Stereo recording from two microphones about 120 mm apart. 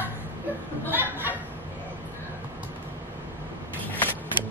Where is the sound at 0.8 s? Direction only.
15° right (ahead or behind).